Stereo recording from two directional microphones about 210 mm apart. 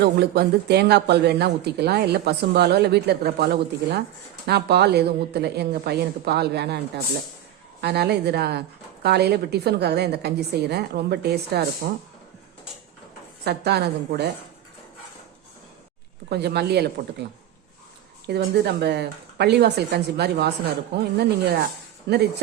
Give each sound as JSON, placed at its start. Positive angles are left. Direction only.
{"t": 0.0, "sound": "speech", "side_deg": -50}
{"t": 13.4, "sound": "speech", "side_deg": -50}
{"t": 16.3, "sound": "speech", "side_deg": -50}
{"t": 18.3, "sound": "speech", "side_deg": -50}